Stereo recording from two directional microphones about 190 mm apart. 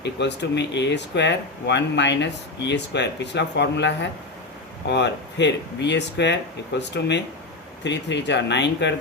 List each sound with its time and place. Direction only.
0.0 s speech: 65° left (ahead or behind)